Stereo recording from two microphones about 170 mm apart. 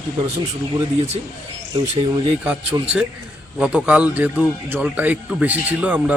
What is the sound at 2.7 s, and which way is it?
Speech, 20° right (ahead or behind).